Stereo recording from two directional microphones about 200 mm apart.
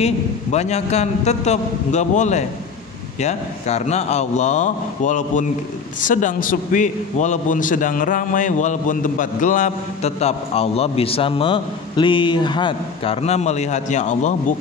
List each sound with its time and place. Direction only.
0.0 s a man's voice: 35° left (ahead or behind)